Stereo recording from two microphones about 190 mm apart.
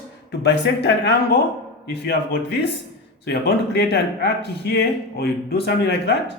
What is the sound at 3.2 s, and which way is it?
Speech, 60° left (ahead or behind).